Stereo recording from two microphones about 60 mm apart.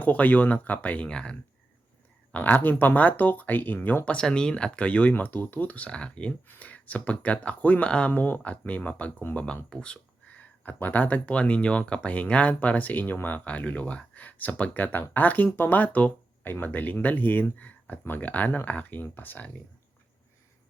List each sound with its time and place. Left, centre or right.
0.0 s speech: left
2.3 s speech: left
4.0 s speech: centre